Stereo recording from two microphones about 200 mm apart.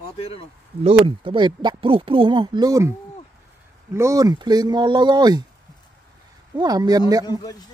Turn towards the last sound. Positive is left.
turn(degrees=-20)  # may be behind; listen again after turning